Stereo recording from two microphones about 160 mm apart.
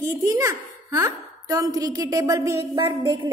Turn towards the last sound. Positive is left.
turn(degrees=-20)  # may be behind; listen again after turning